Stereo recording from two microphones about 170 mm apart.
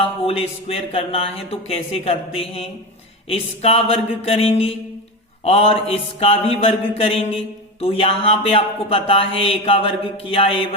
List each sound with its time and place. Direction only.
0.0 s mantra: 35° left (ahead or behind)